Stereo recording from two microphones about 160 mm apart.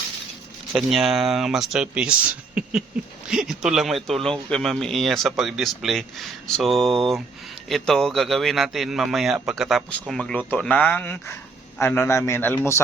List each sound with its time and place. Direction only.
0.7 s speech: centre (ahead or behind)
2.6 s a sound: 5° right (ahead or behind)
3.2 s a man's voice: 5° right (ahead or behind); by 12.8 s 15° left (ahead or behind)